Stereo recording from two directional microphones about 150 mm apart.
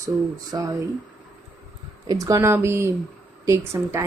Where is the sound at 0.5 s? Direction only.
25° right (ahead or behind).